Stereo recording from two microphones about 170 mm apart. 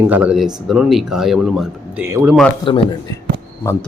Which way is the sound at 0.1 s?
5° right (ahead or behind).